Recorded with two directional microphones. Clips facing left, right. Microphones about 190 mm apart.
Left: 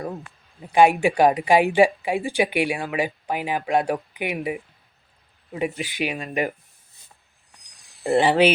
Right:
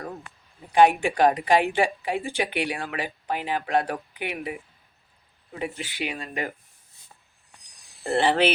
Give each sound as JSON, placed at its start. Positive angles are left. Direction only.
{"t": 0.7, "sound": "speech", "side_deg": 10}
{"t": 5.5, "sound": "speech", "side_deg": 15}
{"t": 8.0, "sound": "speech", "side_deg": 15}